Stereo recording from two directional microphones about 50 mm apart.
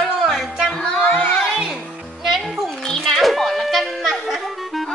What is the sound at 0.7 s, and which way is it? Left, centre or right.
Music, centre.